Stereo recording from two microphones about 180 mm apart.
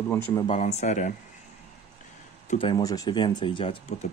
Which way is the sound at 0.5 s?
35° left (ahead or behind).